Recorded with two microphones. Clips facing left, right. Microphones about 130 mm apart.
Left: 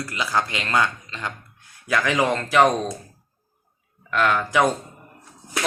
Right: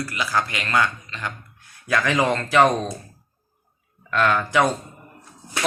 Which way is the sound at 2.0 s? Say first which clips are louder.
Even; 10° left (ahead or behind).